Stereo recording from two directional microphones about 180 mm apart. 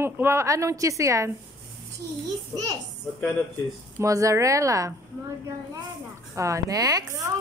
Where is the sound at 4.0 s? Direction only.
15° right (ahead or behind).